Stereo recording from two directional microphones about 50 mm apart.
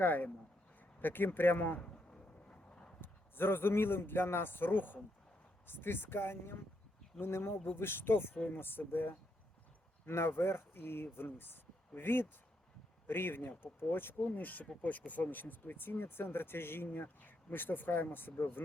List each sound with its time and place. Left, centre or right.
0.0 s speech: left
1.8 s a sound: left
3.0 s a man's voice: left
10.1 s speech: left
14.3 s speech: left